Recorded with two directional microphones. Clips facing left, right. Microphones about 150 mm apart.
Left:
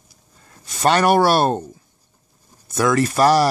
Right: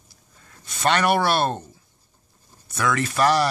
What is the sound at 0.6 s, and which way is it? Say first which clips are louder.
Speech: left 4 dB; 40° left (ahead or behind).